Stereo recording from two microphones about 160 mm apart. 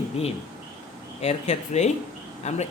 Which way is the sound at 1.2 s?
45° left (ahead or behind).